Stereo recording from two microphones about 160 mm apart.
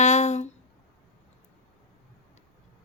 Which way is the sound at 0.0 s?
45° left (ahead or behind).